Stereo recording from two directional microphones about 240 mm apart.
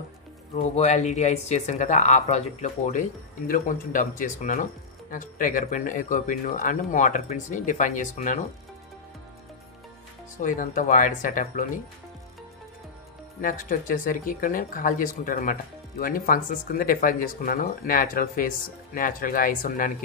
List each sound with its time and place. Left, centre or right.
0.6 s speech: left
10.4 s speech: left
13.4 s speech: left